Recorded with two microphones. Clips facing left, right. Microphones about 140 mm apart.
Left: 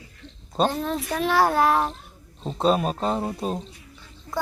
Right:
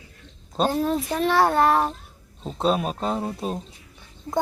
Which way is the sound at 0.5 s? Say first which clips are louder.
Right 1 dB; 5° right (ahead or behind).